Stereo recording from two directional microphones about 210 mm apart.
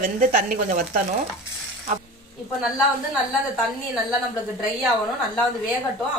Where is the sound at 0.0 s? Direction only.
40° right (ahead or behind).